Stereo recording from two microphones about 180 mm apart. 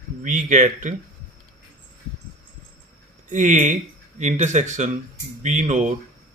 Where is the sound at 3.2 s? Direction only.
40° right (ahead or behind).